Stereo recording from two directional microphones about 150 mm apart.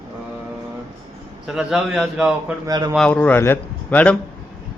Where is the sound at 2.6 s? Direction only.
30° right (ahead or behind).